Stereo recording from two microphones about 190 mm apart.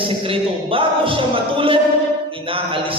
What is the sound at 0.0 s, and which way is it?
A man's voice, 30° right (ahead or behind).